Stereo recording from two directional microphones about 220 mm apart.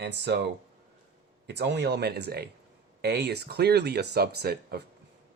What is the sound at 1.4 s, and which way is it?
Speech, 50° right (ahead or behind).